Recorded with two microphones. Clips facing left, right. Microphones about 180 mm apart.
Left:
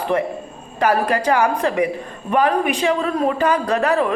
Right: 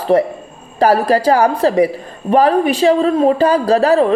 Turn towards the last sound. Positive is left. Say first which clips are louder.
# right 7 dB
turn(degrees=-30)  # may be behind; listen again after turning